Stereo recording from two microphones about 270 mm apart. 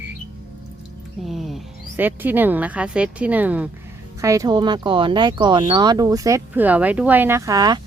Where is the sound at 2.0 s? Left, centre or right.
Centre.